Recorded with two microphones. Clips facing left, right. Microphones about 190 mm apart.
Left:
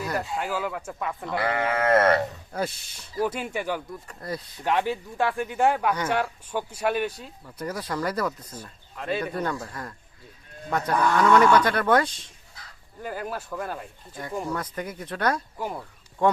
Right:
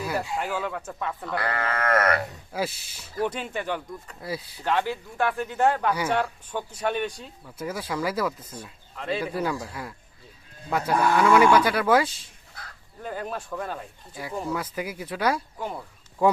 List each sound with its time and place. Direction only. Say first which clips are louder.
0.0 s speech: even; centre (ahead or behind)
1.4 s sheep: left 4 dB; 20° left (ahead or behind)
2.5 s speech: even; 5° right (ahead or behind)
4.2 s speech: even; 5° right (ahead or behind)
4.6 s speech: left 1 dB; 15° left (ahead or behind); by 12.1 s 5° right (ahead or behind)
13.0 s speech: even; 5° left (ahead or behind)
14.1 s speech: even; 5° right (ahead or behind)
15.5 s speech: left 1 dB; 5° left (ahead or behind)
16.2 s speech: right 1 dB; 5° right (ahead or behind)